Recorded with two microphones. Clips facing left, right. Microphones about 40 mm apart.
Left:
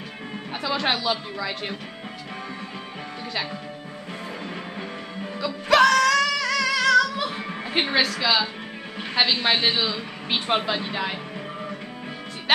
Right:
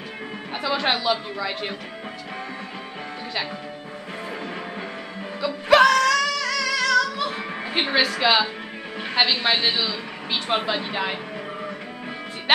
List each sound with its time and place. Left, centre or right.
0.5 s a woman's voice: centre
5.4 s music: centre
6.1 s music: centre
7.2 s music: centre
8.2 s speech: right
9.1 s a man's voice: centre
10.6 s a woman's voice: centre
12.5 s music: centre